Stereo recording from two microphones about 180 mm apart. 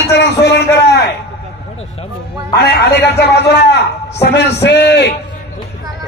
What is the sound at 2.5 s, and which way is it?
A man's voice, 65° left (ahead or behind).